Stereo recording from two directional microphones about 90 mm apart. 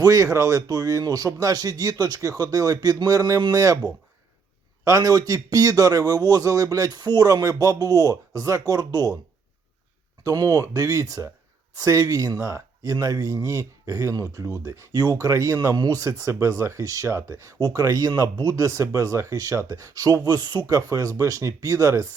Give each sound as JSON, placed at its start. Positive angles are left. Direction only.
{"t": 0.0, "sound": "speech", "side_deg": -40}
{"t": 4.9, "sound": "speech", "side_deg": -40}
{"t": 10.2, "sound": "speech", "side_deg": -40}
{"t": 17.7, "sound": "speech", "side_deg": -40}
{"t": 20.7, "sound": "speech", "side_deg": -40}